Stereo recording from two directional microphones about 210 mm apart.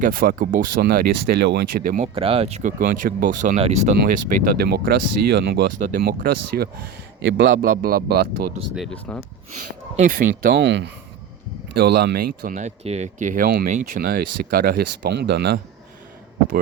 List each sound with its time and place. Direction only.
0.0 s speech: 45° right (ahead or behind)
2.1 s speech: 25° right (ahead or behind)
4.0 s speech: 50° right (ahead or behind)
5.7 s speech: 35° right (ahead or behind)
7.2 s speech: 65° right (ahead or behind)
7.6 s speech: 45° right (ahead or behind)
8.7 s speech: centre (ahead or behind)
9.9 s speech: 40° right (ahead or behind)
10.5 s speech: 55° right (ahead or behind)